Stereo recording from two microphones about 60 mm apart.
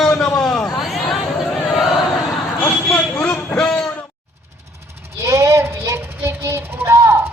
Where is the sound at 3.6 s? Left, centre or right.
Centre.